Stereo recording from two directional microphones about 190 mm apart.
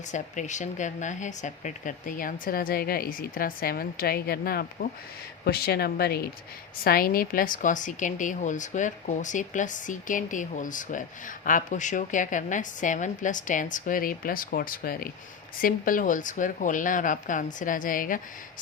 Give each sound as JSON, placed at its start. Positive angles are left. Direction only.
{"t": 0.1, "sound": "speech", "side_deg": 40}